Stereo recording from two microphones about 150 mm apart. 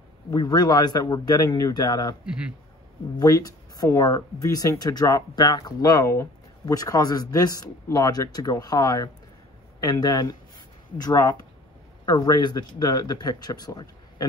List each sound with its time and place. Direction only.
0.3 s speech: 25° left (ahead or behind)
2.2 s a man's voice: 5° right (ahead or behind)
3.2 s speech: 25° left (ahead or behind)